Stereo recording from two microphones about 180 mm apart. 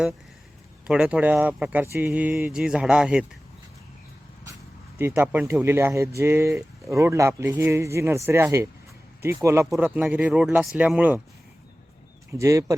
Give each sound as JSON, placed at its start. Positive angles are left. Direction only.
{"t": 0.9, "sound": "speech", "side_deg": -5}
{"t": 4.9, "sound": "speech", "side_deg": -10}
{"t": 12.4, "sound": "speech", "side_deg": -15}